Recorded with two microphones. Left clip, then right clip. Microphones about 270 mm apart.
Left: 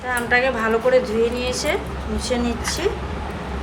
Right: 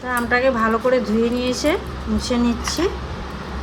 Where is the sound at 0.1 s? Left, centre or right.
Right.